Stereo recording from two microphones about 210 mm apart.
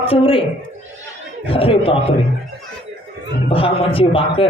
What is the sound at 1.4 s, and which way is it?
Speech, 25° left (ahead or behind).